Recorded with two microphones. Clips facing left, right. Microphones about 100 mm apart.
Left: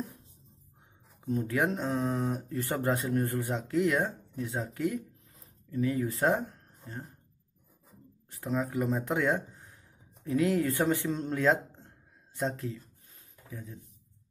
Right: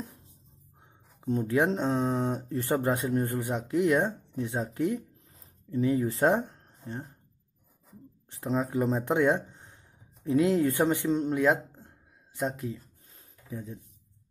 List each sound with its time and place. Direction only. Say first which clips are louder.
1.2 s speech: right 3 dB; 30° right (ahead or behind)
8.3 s speech: right 3 dB; 25° right (ahead or behind)